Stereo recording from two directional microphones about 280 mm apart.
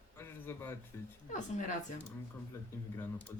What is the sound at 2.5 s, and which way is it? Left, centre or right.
Speech, centre.